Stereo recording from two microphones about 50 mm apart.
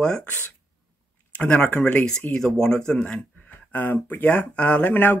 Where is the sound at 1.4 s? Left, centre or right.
Left.